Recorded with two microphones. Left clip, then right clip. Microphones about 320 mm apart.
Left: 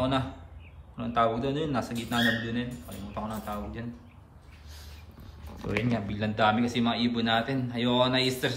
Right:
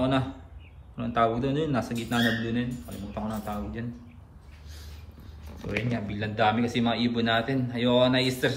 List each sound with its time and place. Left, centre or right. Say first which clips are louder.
0.0 s a sound: right 2 dB; centre
0.9 s a man's voice: right 1 dB; centre
5.9 s a man's voice: left 1 dB; centre